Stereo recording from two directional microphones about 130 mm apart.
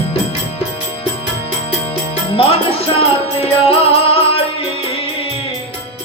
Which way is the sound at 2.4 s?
45° left (ahead or behind).